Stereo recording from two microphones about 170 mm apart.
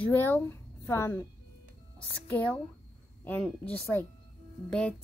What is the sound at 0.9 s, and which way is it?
Speech, 15° left (ahead or behind).